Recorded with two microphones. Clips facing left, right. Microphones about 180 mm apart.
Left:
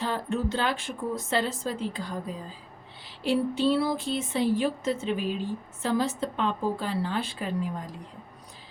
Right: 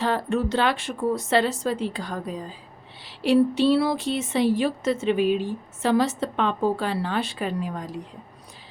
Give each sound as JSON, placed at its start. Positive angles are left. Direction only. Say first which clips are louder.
{"t": 0.0, "sound": "a woman's voice", "louder": "right 5 dB", "side_deg": -75}